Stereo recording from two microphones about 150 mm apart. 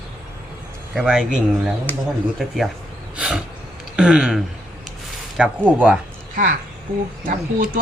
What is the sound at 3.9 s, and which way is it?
Speech, 5° right (ahead or behind).